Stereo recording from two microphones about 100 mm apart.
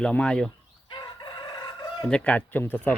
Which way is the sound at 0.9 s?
50° left (ahead or behind).